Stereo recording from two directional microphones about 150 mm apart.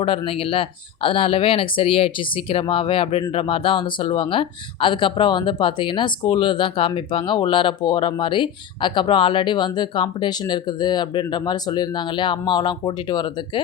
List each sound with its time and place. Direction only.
0.2 s speech: 35° left (ahead or behind)